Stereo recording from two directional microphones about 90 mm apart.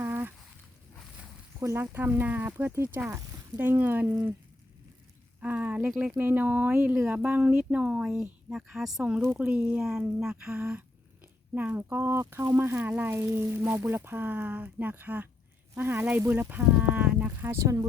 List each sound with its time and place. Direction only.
0.0 s a sound: 25° right (ahead or behind)
1.5 s speech: 30° right (ahead or behind)
5.4 s speech: 15° right (ahead or behind)
9.2 s speech: 20° right (ahead or behind)
17.4 s speech: 30° right (ahead or behind)